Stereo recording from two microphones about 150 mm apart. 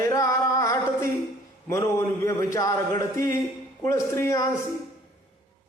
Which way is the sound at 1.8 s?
20° left (ahead or behind).